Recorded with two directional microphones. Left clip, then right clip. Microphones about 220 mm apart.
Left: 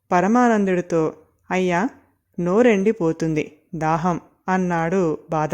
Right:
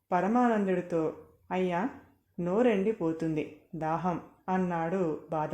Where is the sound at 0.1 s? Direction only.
45° left (ahead or behind).